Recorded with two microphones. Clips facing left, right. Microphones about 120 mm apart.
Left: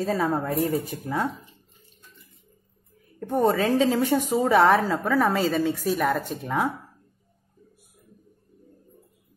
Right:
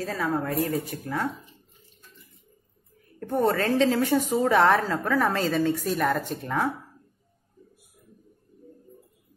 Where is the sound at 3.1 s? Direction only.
5° left (ahead or behind).